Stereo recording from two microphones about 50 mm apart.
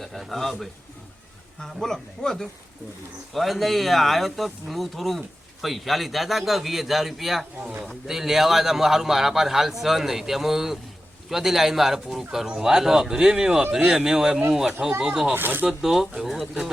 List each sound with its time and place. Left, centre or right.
0.0 s a man's voice: centre
15.3 s speech: right
15.8 s speech: centre